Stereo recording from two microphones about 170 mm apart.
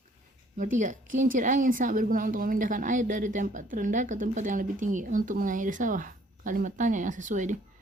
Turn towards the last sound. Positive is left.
turn(degrees=-45)  # may be behind; listen again after turning